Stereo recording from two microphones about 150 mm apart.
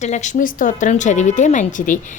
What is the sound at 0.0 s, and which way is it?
A woman's voice, 50° left (ahead or behind).